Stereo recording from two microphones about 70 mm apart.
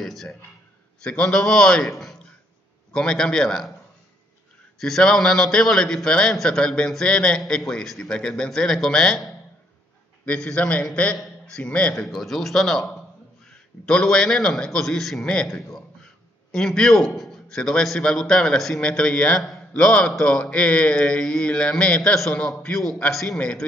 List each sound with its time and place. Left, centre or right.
0.0 s a man's voice: centre
4.7 s a man's voice: centre
10.2 s a man's voice: centre
11.9 s a man's voice: centre